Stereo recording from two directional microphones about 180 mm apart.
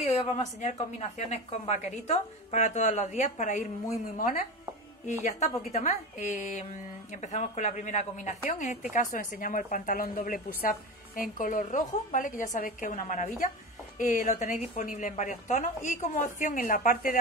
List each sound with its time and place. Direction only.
0.0 s a woman's voice: 40° left (ahead or behind)